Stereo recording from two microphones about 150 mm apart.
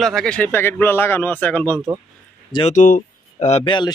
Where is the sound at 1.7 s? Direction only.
20° right (ahead or behind).